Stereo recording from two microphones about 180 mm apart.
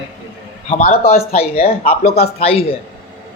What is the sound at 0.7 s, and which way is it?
Speech, 35° left (ahead or behind).